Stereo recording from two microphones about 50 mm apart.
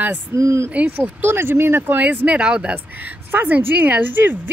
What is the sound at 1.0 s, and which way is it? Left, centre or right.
Speech, right.